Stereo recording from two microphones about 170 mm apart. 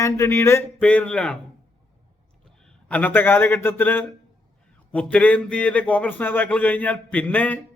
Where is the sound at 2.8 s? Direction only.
10° left (ahead or behind).